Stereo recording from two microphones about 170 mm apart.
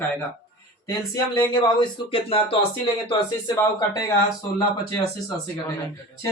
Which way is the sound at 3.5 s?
20° left (ahead or behind).